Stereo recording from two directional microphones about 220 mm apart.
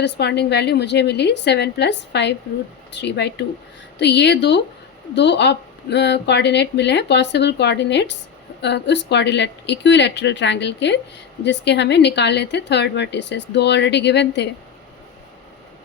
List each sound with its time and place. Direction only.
0.0 s speech: 50° left (ahead or behind)